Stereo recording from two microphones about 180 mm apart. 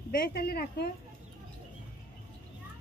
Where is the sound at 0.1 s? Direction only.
55° left (ahead or behind).